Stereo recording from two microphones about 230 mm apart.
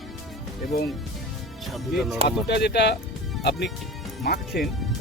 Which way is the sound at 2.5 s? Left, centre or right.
Left.